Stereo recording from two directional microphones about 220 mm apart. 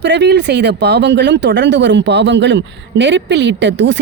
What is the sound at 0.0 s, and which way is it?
Speech, 50° right (ahead or behind).